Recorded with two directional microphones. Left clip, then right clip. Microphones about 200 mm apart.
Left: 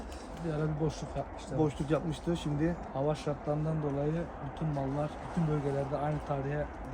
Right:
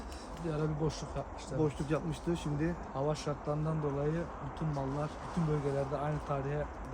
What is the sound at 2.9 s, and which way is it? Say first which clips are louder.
A man's voice: left 2 dB; 10° right (ahead or behind).